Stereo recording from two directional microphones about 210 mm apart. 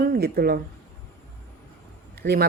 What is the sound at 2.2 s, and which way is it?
Speech, 50° right (ahead or behind).